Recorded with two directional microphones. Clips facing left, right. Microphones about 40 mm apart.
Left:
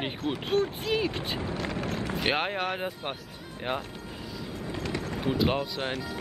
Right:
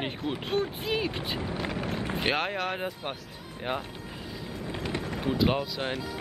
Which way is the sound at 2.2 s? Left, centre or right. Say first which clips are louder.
Left 1 dB; centre.